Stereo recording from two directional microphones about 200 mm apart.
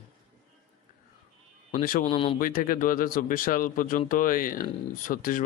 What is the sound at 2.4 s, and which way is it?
Speech, 45° left (ahead or behind).